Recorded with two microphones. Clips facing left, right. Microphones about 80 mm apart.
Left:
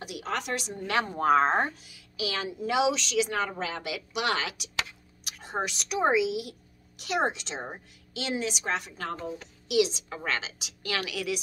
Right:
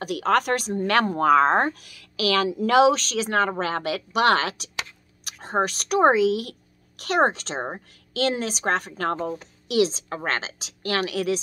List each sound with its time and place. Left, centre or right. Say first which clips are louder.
0.0 s a woman's voice: right 11 dB; right
0.7 s speech: right 7 dB; right
2.5 s a woman's voice: right 8 dB; right
9.4 s a woman's voice: right 1 dB; right